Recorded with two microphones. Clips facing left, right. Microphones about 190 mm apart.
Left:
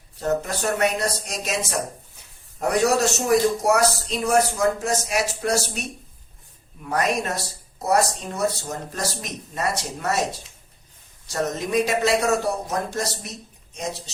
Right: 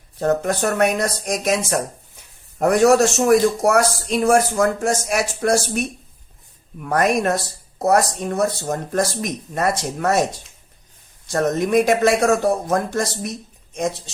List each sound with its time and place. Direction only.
0.2 s speech: 55° right (ahead or behind)
11.3 s speech: 55° right (ahead or behind)